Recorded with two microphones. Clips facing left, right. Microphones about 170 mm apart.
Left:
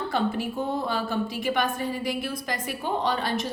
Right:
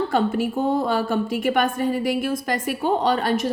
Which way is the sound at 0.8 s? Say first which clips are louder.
Right 6 dB; 50° right (ahead or behind).